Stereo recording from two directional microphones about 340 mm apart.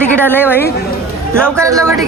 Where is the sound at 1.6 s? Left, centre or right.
Centre.